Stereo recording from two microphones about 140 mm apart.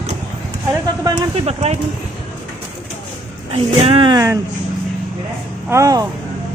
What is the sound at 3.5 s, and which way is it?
Speech, 45° right (ahead or behind).